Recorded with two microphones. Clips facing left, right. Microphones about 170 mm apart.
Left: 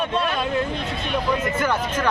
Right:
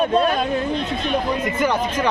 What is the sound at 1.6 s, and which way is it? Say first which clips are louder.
Speech: right 3 dB; 10° right (ahead or behind).